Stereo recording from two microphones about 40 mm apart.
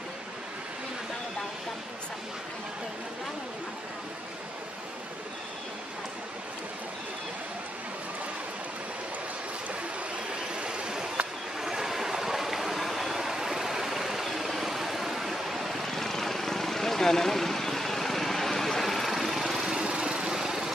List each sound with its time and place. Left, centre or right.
10.3 s vehicle: right
11.6 s stream: centre
19.7 s vehicle: right